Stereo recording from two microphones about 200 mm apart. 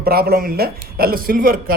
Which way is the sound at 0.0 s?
50° right (ahead or behind).